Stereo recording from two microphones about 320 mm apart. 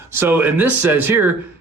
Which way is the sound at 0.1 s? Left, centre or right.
Centre.